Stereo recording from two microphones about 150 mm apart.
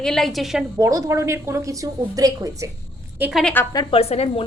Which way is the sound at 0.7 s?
20° right (ahead or behind).